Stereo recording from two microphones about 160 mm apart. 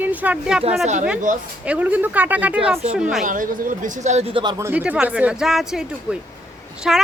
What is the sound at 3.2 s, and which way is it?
Speech, 55° right (ahead or behind).